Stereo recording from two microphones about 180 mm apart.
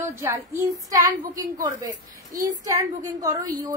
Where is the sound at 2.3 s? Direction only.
20° right (ahead or behind).